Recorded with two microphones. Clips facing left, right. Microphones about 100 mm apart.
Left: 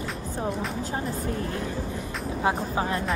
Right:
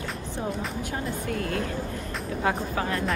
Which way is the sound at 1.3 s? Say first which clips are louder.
Right 2 dB; 70° right (ahead or behind).